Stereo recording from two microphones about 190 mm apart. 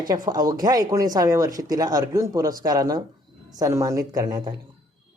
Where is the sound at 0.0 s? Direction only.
20° right (ahead or behind).